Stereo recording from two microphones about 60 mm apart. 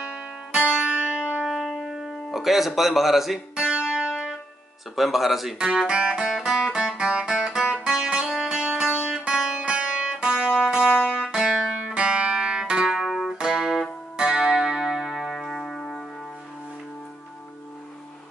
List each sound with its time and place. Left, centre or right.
0.0 s music: centre
2.3 s speech: centre
3.5 s music: centre
4.9 s speech: centre
5.9 s music: centre
12.8 s music: centre
14.1 s music: centre